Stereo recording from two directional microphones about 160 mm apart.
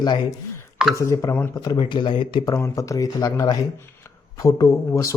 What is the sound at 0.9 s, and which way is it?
Speech, 20° left (ahead or behind).